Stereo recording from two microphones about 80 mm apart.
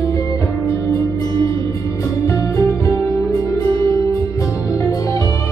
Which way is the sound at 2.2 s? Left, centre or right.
Left.